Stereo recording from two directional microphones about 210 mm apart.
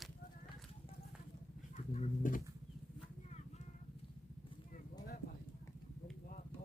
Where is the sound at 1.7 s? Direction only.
35° left (ahead or behind).